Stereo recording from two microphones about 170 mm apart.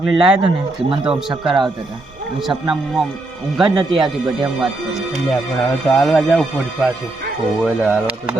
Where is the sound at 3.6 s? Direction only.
25° right (ahead or behind).